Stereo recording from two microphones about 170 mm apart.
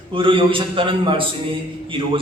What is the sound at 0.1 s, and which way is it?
A man's voice, 30° right (ahead or behind).